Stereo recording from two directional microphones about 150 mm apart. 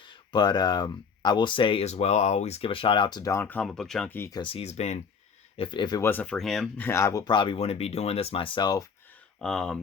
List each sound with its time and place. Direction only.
0.0 s speech: 35° left (ahead or behind)
3.4 s speech: 10° left (ahead or behind)
4.3 s speech: 35° left (ahead or behind)
5.5 s speech: 30° left (ahead or behind)
6.0 s speech: 15° left (ahead or behind)
6.2 s speech: 5° left (ahead or behind)
6.8 s speech: 20° left (ahead or behind)
9.4 s speech: 5° left (ahead or behind)